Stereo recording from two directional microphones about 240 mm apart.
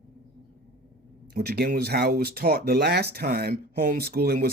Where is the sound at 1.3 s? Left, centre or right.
Right.